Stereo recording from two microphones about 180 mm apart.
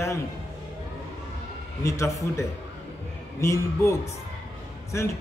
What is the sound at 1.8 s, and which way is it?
A man's voice, 15° left (ahead or behind).